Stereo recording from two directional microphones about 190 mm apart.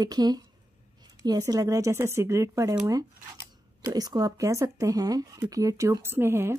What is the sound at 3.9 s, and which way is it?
A woman's voice, 20° right (ahead or behind).